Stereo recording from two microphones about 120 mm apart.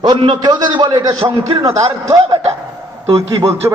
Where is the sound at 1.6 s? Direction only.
30° right (ahead or behind).